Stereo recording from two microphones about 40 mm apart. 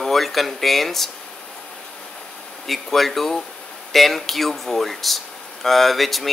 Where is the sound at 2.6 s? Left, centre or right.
Centre.